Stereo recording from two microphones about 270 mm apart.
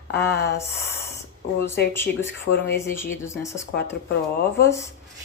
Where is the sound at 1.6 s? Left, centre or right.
Centre.